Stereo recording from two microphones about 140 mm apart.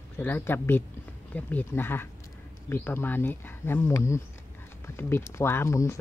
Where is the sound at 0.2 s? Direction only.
15° left (ahead or behind).